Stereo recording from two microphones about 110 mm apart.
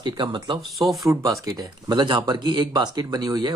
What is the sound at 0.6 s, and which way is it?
Speech, centre (ahead or behind).